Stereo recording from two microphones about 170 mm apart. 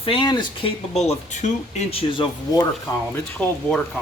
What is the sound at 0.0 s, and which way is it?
Speech, 30° left (ahead or behind).